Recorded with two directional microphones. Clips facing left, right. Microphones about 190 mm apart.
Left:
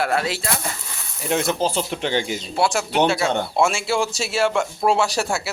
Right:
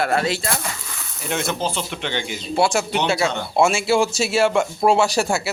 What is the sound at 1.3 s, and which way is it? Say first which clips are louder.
Speech: left 3 dB; 35° left (ahead or behind).